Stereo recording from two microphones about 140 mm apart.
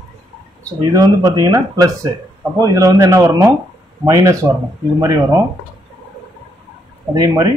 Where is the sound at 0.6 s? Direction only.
25° right (ahead or behind).